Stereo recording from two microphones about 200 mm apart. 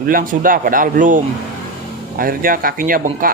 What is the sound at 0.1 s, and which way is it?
Speech, 45° right (ahead or behind).